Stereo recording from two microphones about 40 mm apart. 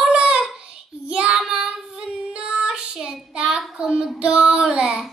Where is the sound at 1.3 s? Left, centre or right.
Centre.